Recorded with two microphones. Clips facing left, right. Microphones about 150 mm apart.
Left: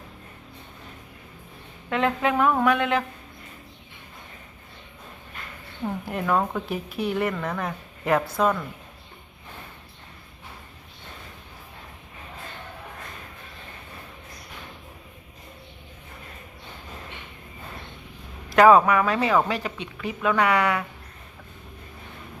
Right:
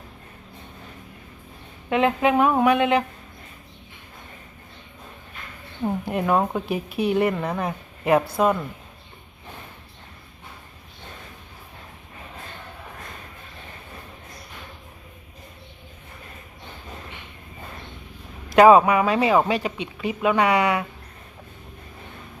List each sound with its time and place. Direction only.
1.9 s a woman's voice: 20° right (ahead or behind)
5.8 s a woman's voice: 20° right (ahead or behind)
18.5 s speech: 20° right (ahead or behind)